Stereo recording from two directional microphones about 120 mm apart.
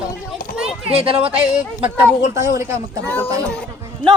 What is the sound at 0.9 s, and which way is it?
Speech, 50° right (ahead or behind).